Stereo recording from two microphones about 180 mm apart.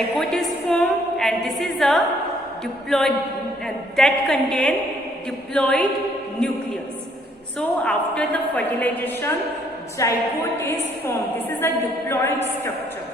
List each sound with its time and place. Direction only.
0.2 s a woman's voice: centre (ahead or behind)
7.9 s a woman's voice: 5° left (ahead or behind)